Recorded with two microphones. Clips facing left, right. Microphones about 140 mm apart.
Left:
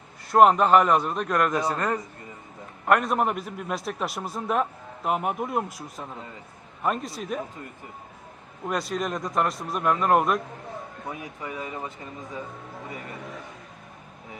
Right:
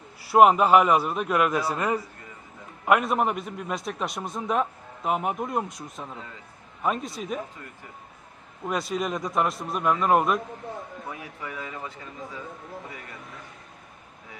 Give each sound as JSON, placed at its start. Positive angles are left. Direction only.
{"t": 0.3, "sound": "a man's voice", "side_deg": -5}
{"t": 8.6, "sound": "a man's voice", "side_deg": 0}
{"t": 11.4, "sound": "speech", "side_deg": 20}